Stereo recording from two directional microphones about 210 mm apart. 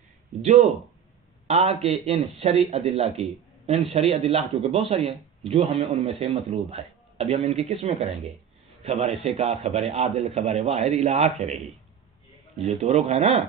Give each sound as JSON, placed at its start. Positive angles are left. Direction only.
{"t": 0.4, "sound": "a man's voice", "side_deg": -35}
{"t": 12.6, "sound": "a man's voice", "side_deg": -30}